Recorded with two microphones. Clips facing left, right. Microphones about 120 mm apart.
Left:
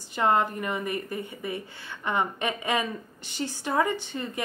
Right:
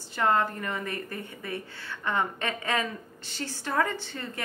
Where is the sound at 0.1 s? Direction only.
20° left (ahead or behind).